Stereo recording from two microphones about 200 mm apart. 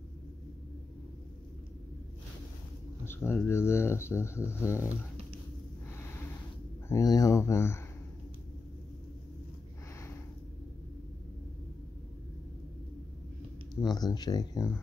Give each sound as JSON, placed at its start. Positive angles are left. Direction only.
{"t": 3.1, "sound": "speech", "side_deg": 10}
{"t": 6.9, "sound": "speech", "side_deg": 20}
{"t": 13.7, "sound": "speech", "side_deg": 20}